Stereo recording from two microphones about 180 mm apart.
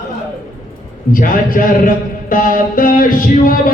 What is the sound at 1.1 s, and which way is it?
A man's voice, 50° left (ahead or behind).